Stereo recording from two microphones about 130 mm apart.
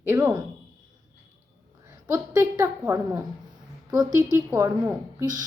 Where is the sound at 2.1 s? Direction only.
20° right (ahead or behind).